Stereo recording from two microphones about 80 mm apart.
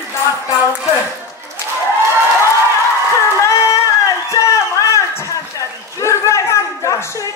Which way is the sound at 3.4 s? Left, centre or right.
Left.